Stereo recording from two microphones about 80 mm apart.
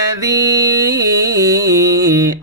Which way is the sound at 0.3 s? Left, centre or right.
Right.